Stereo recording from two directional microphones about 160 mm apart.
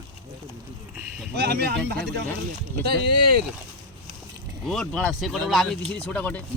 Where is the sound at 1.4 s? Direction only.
90° right.